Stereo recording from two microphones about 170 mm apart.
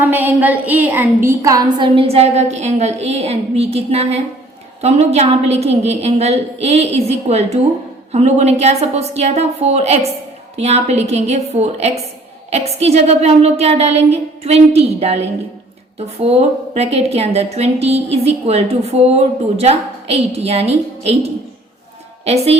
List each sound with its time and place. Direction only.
0.0 s a woman's voice: 10° right (ahead or behind); by 22.5 s 40° right (ahead or behind)